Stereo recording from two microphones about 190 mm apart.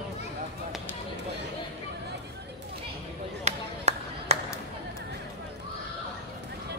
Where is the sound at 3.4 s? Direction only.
35° right (ahead or behind).